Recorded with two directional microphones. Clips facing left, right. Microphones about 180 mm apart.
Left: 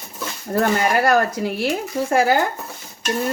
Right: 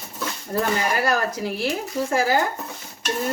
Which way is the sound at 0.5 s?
55° left (ahead or behind).